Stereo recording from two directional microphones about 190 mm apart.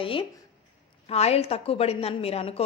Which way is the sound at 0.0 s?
30° left (ahead or behind).